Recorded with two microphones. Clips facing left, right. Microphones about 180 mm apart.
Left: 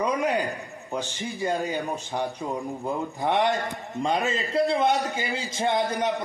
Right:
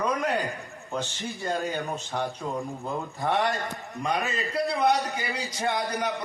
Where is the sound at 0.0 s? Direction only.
10° left (ahead or behind).